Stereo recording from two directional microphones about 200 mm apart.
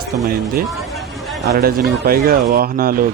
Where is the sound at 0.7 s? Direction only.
Centre (ahead or behind).